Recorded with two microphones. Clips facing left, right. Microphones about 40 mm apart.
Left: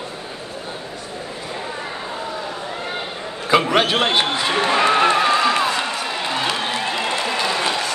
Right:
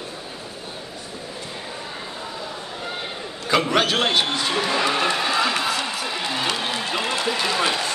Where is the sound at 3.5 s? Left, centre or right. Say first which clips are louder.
Left 3 dB; centre.